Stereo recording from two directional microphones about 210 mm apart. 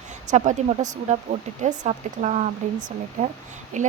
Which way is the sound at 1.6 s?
35° right (ahead or behind).